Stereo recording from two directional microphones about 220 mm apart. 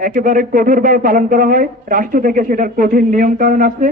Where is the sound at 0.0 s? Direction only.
40° right (ahead or behind).